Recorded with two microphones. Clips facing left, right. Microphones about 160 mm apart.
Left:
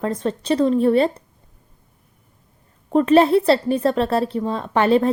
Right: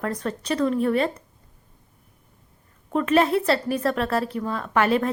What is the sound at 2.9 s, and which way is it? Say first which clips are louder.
A woman's voice: left 6 dB; 30° left (ahead or behind).